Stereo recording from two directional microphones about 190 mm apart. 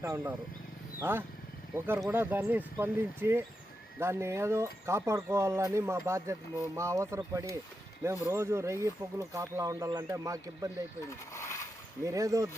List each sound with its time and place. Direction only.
0.0 s speech: 15° right (ahead or behind)
11.1 s a sound: 15° left (ahead or behind)
12.0 s speech: 15° right (ahead or behind)